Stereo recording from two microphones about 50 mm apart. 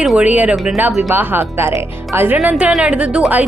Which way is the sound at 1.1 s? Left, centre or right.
Right.